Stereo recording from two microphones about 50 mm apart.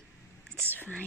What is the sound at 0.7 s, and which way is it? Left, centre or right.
Speech, left.